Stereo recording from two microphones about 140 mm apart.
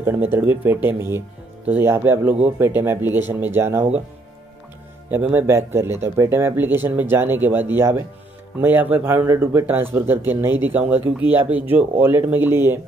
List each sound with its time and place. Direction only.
0.0 s speech: 15° right (ahead or behind)
5.1 s speech: 15° right (ahead or behind)